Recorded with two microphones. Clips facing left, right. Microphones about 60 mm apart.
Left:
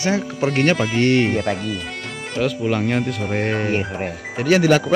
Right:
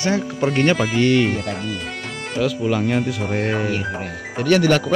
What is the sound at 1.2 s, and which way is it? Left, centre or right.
Speech, left.